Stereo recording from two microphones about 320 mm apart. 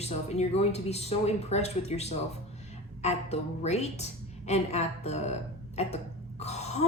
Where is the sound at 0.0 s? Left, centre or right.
Centre.